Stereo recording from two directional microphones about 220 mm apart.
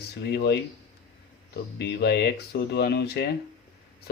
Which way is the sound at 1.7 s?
50° left (ahead or behind).